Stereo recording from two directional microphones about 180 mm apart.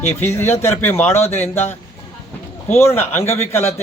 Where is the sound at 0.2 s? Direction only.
15° left (ahead or behind).